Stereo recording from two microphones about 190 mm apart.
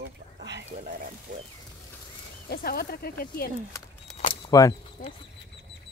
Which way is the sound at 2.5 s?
55° left (ahead or behind).